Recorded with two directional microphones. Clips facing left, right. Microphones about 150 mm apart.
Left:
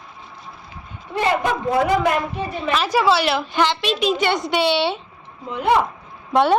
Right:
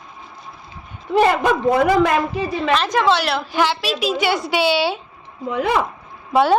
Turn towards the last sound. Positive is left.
turn(degrees=0)  # may be behind; listen again after turning